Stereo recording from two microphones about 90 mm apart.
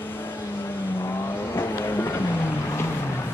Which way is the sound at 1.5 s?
25° left (ahead or behind).